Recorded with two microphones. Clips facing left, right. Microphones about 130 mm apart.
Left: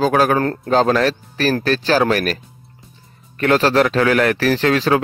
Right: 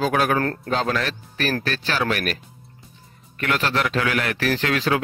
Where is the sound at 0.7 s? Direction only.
40° left (ahead or behind).